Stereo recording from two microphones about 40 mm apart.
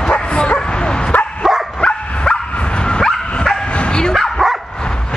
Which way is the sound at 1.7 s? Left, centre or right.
Left.